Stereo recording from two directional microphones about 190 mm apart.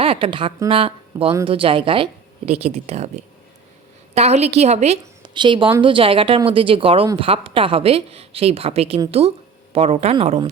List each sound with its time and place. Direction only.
0.0 s a woman's voice: 30° right (ahead or behind)
4.1 s a woman's voice: 35° right (ahead or behind)